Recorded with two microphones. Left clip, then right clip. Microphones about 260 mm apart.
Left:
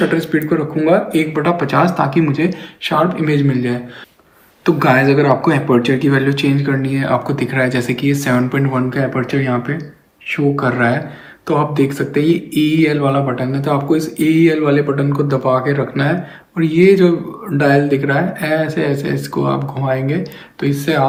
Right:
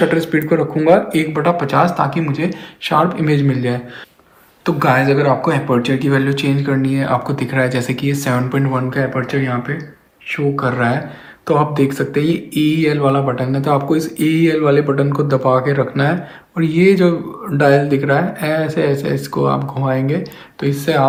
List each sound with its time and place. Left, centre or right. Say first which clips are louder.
0.0 s speech: right 1 dB; right